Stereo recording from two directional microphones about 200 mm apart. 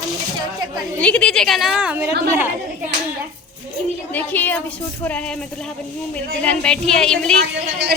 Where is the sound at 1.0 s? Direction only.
5° left (ahead or behind).